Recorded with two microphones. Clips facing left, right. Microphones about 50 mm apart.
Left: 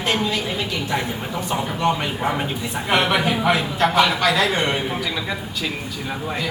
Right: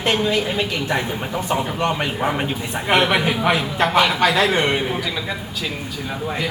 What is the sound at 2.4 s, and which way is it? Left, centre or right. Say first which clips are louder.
Speech: right 1 dB; right.